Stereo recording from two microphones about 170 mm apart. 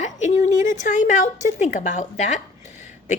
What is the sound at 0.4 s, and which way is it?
A woman's voice, 45° left (ahead or behind).